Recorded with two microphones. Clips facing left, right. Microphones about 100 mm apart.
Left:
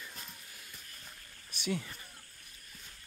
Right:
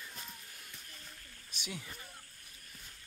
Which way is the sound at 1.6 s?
10° right (ahead or behind).